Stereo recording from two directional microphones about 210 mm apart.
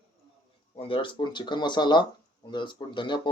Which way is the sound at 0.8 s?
25° left (ahead or behind).